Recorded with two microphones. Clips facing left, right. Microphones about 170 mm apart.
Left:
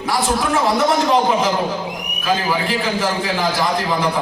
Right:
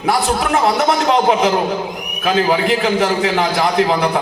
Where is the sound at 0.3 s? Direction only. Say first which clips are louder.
Right 2 dB; 70° right (ahead or behind).